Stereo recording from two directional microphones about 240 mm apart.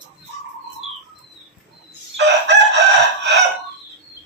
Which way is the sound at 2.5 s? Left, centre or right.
Right.